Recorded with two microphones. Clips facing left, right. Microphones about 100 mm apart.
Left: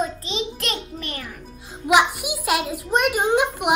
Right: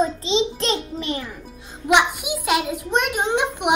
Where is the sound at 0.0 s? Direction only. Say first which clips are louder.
Right 6 dB; 25° right (ahead or behind).